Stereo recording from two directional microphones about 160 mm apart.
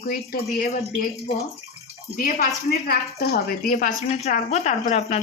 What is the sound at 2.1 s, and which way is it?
A woman's voice, 70° left (ahead or behind).